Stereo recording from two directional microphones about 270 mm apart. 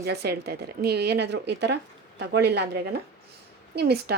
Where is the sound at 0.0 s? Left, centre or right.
Right.